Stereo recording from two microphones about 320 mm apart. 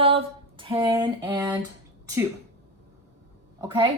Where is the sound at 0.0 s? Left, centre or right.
Centre.